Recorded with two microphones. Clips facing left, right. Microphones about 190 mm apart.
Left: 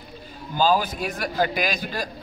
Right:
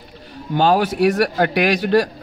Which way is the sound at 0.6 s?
70° right (ahead or behind).